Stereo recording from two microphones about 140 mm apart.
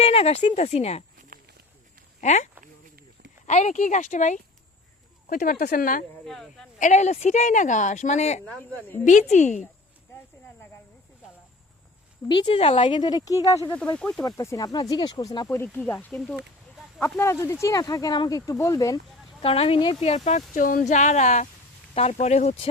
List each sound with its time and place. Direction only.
0.0 s speech: 45° left (ahead or behind)
2.2 s speech: 55° left (ahead or behind)
5.3 s speech: 90° left
6.2 s speech: 5° left (ahead or behind)
6.7 s speech: 60° left (ahead or behind)
8.4 s speech: 10° left (ahead or behind)
9.0 s speech: 60° left (ahead or behind)
12.3 s a woman's voice: 40° left (ahead or behind)
13.9 s speech: 10° left (ahead or behind)
14.3 s speech: 25° left (ahead or behind)
17.0 s speech: 20° left (ahead or behind)
19.4 s speech: 45° left (ahead or behind)